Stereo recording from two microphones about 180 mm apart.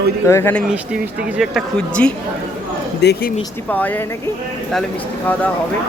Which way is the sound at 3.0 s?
65° left (ahead or behind).